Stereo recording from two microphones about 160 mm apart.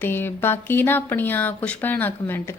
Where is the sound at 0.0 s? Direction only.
15° left (ahead or behind).